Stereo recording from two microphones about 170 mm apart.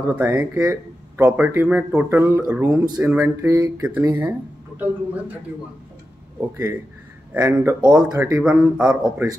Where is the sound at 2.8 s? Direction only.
25° right (ahead or behind).